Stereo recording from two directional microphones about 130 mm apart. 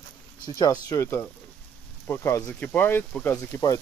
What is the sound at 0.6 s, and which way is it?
Speech, 30° left (ahead or behind).